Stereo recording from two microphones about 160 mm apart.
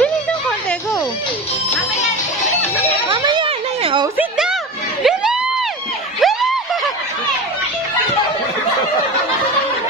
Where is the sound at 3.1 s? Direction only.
30° right (ahead or behind).